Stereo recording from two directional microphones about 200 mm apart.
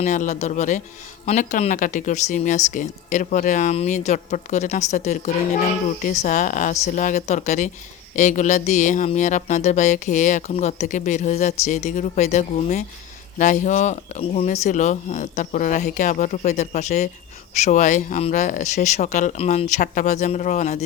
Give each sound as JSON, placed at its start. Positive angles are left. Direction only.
{"t": 0.0, "sound": "speech", "side_deg": 40}